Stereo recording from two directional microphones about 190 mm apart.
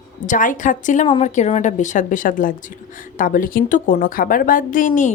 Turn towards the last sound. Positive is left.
turn(degrees=40)  # may be behind; listen again after turning